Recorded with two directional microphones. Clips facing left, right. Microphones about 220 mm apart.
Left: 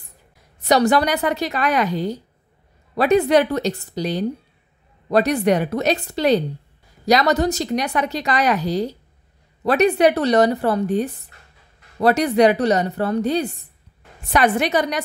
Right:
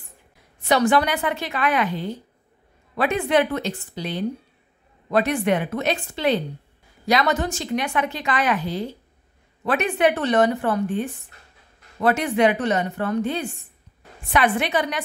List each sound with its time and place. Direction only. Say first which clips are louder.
0.6 s a woman's voice: left 2 dB; 40° left (ahead or behind)